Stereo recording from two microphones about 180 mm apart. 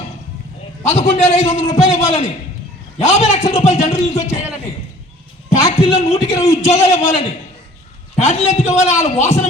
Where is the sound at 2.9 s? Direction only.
40° left (ahead or behind).